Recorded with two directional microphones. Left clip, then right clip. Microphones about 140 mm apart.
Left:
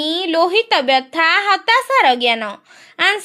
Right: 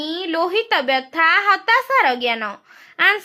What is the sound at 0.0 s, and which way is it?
Speech, 30° left (ahead or behind).